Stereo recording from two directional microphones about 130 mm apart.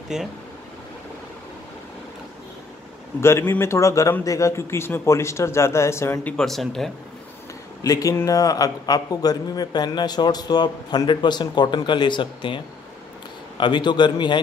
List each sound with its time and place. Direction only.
0.1 s speech: 5° right (ahead or behind)
3.2 s speech: 20° left (ahead or behind)
6.3 s speech: centre (ahead or behind)
7.8 s a man's voice: 25° left (ahead or behind)